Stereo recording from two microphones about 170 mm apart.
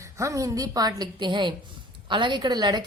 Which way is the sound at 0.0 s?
20° right (ahead or behind).